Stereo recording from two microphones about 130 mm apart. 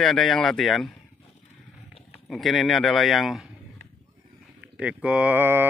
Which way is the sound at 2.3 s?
Centre (ahead or behind).